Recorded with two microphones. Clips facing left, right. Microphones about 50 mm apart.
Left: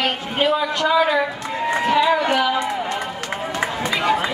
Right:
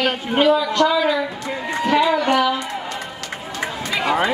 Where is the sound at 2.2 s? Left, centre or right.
Centre.